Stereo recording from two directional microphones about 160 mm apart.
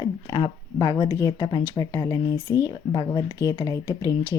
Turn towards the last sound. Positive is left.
turn(degrees=20)  # may be behind; listen again after turning